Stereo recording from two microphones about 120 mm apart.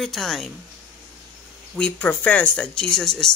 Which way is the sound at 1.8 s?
10° left (ahead or behind).